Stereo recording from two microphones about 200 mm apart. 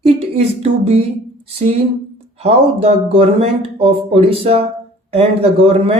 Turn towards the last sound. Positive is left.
turn(degrees=-30)  # may be behind; listen again after turning